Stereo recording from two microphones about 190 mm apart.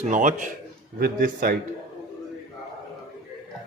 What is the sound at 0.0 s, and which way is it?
Speech, 40° right (ahead or behind).